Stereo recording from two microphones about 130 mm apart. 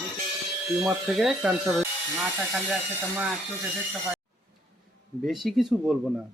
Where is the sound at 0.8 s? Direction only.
Centre (ahead or behind).